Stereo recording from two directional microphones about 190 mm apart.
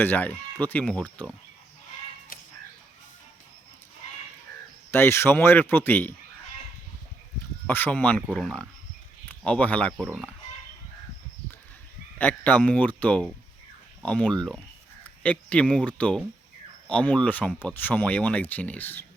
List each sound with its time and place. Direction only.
0.0 s speech: 10° left (ahead or behind)
2.3 s chicken: 50° left (ahead or behind)
4.9 s speech: 10° left (ahead or behind)
7.7 s speech: 10° left (ahead or behind)
12.2 s speech: 5° left (ahead or behind)